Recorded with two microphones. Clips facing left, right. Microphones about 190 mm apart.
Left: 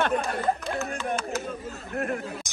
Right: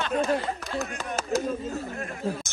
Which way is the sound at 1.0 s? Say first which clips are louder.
Left 4 dB; 40° right (ahead or behind).